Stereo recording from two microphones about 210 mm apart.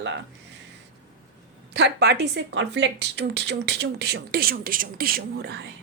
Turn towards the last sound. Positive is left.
turn(degrees=-50)  # may be behind; listen again after turning